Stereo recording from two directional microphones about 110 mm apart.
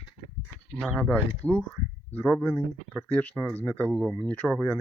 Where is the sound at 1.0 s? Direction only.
10° left (ahead or behind).